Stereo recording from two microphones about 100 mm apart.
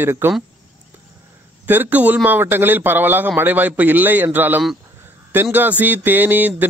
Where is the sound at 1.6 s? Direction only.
20° right (ahead or behind).